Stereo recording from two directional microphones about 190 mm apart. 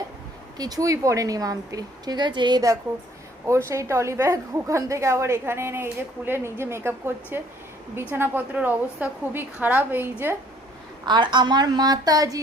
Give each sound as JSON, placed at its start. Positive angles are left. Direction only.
{"t": 0.5, "sound": "a woman's voice", "side_deg": -20}
{"t": 11.0, "sound": "a woman's voice", "side_deg": -25}